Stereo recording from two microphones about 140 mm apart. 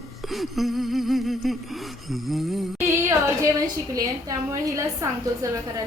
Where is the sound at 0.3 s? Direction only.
Centre (ahead or behind).